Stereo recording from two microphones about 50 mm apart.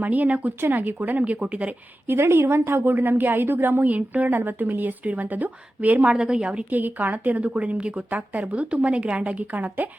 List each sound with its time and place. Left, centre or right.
0.0 s a woman's voice: right
2.0 s a woman's voice: right
3.8 s a woman's voice: right
6.1 s a woman's voice: centre
6.7 s a woman's voice: right